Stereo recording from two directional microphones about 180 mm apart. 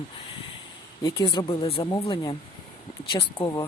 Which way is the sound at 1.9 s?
20° left (ahead or behind).